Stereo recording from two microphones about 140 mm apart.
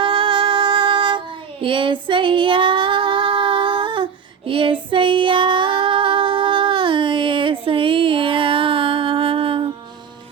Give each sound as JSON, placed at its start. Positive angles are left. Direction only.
{"t": 0.0, "sound": "music", "side_deg": -35}
{"t": 1.6, "sound": "female singing", "side_deg": -35}